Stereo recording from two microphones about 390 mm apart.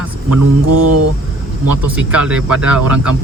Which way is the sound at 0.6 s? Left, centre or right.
Right.